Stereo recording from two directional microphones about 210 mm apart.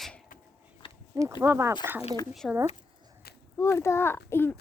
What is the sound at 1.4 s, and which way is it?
Speech, 15° right (ahead or behind).